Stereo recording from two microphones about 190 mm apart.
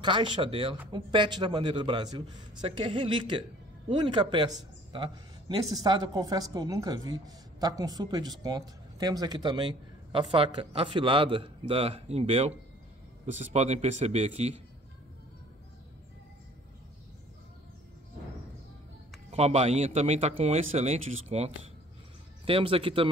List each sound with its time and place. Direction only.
0.0 s speech: 25° right (ahead or behind)
5.8 s speech: 20° right (ahead or behind)
19.3 s speech: 35° right (ahead or behind)